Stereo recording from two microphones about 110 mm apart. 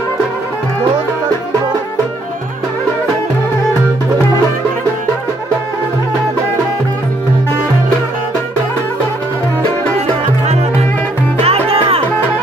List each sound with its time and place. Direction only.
11.4 s music: 65° right (ahead or behind)